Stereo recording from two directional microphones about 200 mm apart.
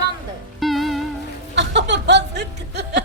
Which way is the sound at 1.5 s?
60° right (ahead or behind).